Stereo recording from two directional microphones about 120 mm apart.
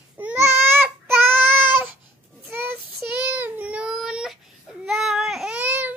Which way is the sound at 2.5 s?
15° right (ahead or behind).